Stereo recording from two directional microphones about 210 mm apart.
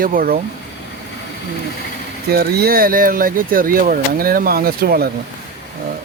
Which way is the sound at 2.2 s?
50° right (ahead or behind).